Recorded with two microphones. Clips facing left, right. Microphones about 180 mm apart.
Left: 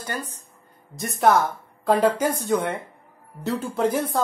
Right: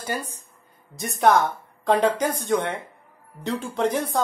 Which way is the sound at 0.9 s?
Centre (ahead or behind).